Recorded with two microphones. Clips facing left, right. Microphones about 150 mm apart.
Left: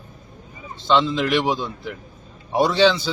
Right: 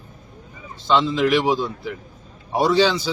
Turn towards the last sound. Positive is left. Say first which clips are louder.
# left 1 dB
turn(degrees=-5)  # may be behind; listen again after turning